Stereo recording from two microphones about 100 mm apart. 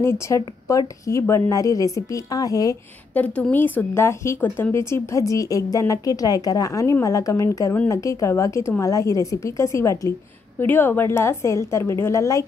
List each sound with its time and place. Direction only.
0.0 s a woman's voice: 30° left (ahead or behind)
3.2 s a woman's voice: 15° left (ahead or behind); by 12.4 s 30° left (ahead or behind)